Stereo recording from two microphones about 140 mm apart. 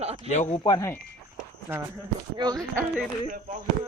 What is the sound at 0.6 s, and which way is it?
Speech, 30° left (ahead or behind).